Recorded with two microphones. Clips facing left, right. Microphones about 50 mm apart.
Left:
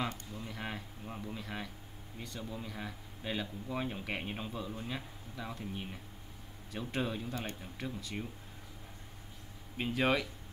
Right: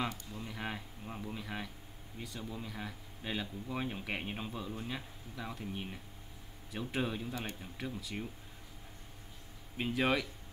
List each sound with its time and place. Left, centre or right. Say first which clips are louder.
0.3 s a sound: even; centre
2.1 s speech: even; centre
9.8 s speech: left 1 dB; centre